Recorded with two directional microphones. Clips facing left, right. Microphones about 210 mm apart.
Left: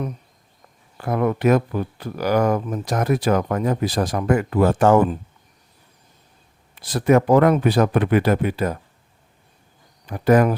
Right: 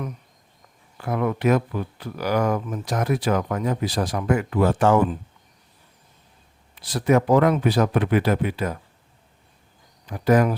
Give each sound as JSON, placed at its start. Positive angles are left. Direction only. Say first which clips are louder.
{"t": 0.9, "sound": "speech", "louder": "left 3 dB", "side_deg": 45}
{"t": 6.8, "sound": "speech", "louder": "left 3 dB", "side_deg": 50}
{"t": 10.1, "sound": "speech", "louder": "left 3 dB", "side_deg": 55}